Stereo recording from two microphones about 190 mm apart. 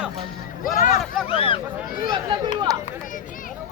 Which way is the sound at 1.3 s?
30° left (ahead or behind).